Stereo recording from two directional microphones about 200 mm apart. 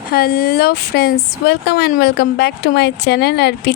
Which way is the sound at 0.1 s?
50° left (ahead or behind).